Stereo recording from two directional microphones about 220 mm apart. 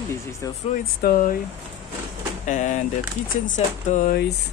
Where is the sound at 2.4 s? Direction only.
35° left (ahead or behind).